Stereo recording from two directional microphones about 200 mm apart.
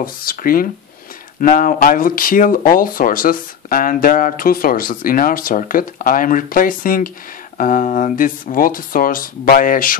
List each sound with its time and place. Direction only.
0.0 s speech: 45° left (ahead or behind)